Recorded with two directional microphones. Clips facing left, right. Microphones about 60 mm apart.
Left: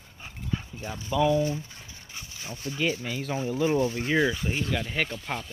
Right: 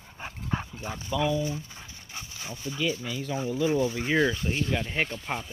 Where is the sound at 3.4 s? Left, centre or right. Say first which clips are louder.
Left 1 dB; left.